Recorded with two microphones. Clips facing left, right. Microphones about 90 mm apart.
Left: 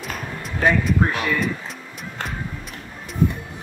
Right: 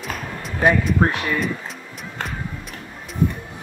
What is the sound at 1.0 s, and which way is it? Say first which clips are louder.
Speech: right 2 dB; 40° right (ahead or behind).